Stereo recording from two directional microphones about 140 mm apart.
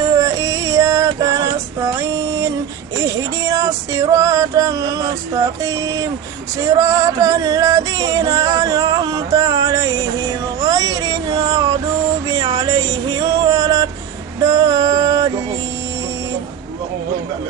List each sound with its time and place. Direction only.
0.1 s music: 25° right (ahead or behind)
3.0 s music: 25° right (ahead or behind)
10.6 s a sound: 25° right (ahead or behind)
12.5 s music: 25° right (ahead or behind)